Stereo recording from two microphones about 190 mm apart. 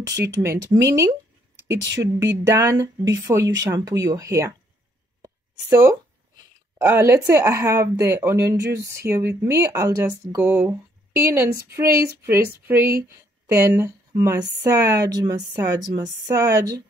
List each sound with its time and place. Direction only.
0.3 s speech: 15° right (ahead or behind)
2.2 s speech: 15° right (ahead or behind)
5.2 s a sound: 15° right (ahead or behind)
6.8 s speech: 10° right (ahead or behind)